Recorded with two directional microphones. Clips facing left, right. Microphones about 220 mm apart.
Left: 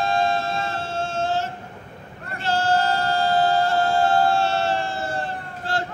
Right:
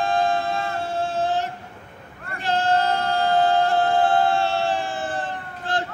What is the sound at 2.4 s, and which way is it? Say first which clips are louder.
Music: even; 15° right (ahead or behind).